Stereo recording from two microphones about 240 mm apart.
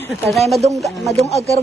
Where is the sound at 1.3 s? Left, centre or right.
Left.